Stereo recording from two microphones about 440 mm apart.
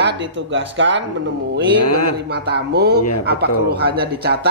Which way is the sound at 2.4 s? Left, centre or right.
Right.